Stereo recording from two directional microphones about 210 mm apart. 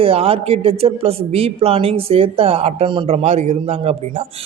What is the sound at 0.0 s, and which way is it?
A woman's voice, 25° right (ahead or behind).